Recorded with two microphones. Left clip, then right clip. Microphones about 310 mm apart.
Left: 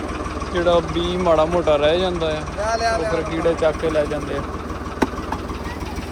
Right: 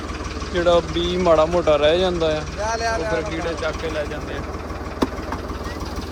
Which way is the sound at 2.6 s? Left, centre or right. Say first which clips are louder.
Left 3 dB; left.